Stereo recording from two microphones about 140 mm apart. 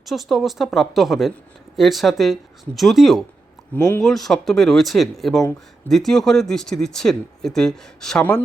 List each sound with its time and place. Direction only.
0.0 s speech: centre (ahead or behind)
3.8 s speech: 20° left (ahead or behind)
4.0 s speech: centre (ahead or behind)